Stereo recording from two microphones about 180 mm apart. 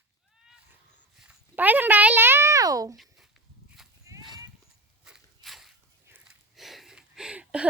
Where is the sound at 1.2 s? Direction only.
5° right (ahead or behind).